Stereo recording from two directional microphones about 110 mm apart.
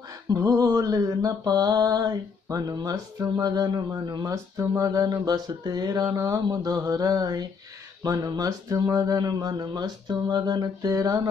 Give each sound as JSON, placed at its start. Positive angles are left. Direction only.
{"t": 0.3, "sound": "speech", "side_deg": -35}